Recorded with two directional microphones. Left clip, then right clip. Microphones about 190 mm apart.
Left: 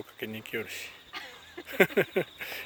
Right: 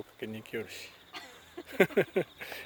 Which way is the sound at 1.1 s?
55° right (ahead or behind).